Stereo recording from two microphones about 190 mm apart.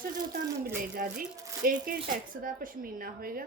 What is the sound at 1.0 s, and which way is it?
A woman's voice, 50° right (ahead or behind).